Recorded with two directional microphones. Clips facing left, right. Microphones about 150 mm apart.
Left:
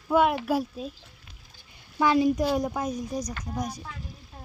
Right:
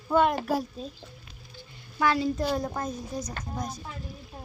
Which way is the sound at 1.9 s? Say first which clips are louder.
Left 4 dB; 20° left (ahead or behind).